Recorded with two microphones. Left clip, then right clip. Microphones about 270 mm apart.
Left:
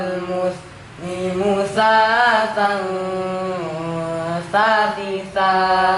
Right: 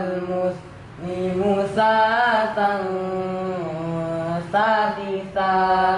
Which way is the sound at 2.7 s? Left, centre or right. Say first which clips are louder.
Left 2 dB; centre.